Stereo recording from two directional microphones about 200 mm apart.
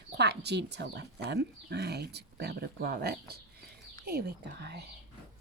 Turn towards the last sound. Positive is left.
turn(degrees=-55)  # may be behind; listen again after turning